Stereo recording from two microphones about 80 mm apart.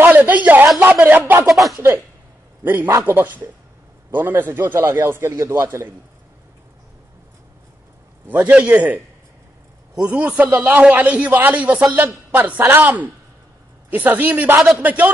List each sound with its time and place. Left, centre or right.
0.0 s a woman's voice: right
1.5 s speech: centre
2.6 s a man's voice: right
8.3 s speech: centre
10.8 s a man's voice: centre